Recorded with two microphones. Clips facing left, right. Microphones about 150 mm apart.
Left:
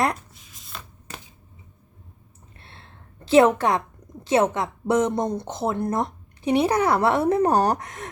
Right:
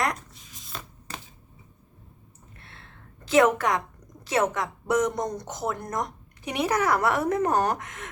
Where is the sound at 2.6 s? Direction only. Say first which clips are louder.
Left 2 dB; 30° left (ahead or behind).